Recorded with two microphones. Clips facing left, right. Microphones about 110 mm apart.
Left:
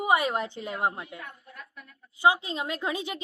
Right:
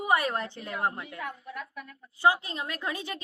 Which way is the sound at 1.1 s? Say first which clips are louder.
Right 6 dB; 90° right.